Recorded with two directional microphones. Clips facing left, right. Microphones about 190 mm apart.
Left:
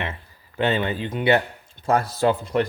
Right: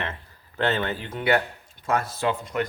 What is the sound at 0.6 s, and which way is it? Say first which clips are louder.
Speech: left 3 dB; 15° left (ahead or behind).